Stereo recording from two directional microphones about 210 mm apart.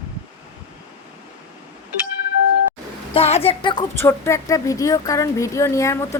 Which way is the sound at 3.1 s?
30° left (ahead or behind).